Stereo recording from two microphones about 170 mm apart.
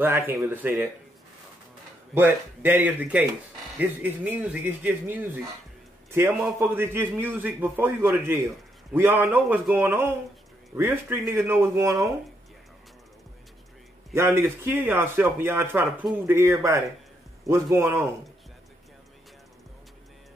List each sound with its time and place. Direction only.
0.0 s a man's voice: 10° right (ahead or behind)
2.1 s a man's voice: 10° right (ahead or behind)
14.1 s a man's voice: 15° right (ahead or behind)